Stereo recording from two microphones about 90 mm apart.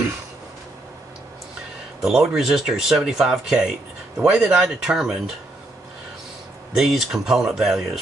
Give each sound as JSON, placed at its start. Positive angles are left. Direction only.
{"t": 2.0, "sound": "speech", "side_deg": -5}
{"t": 6.7, "sound": "speech", "side_deg": -5}